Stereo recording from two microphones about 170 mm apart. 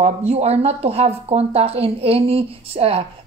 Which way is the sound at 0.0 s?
40° right (ahead or behind).